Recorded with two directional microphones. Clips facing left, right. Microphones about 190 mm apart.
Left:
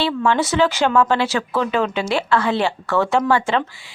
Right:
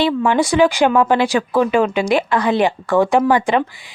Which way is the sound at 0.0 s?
15° right (ahead or behind).